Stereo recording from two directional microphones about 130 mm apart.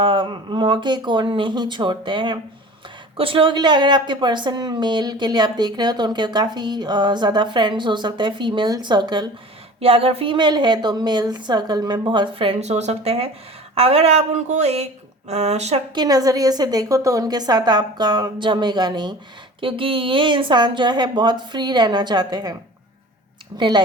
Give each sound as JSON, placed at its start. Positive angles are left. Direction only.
{"t": 0.0, "sound": "a woman's voice", "side_deg": -40}
{"t": 9.8, "sound": "a woman's voice", "side_deg": -45}
{"t": 16.0, "sound": "a woman's voice", "side_deg": -30}
{"t": 23.6, "sound": "a woman's voice", "side_deg": -35}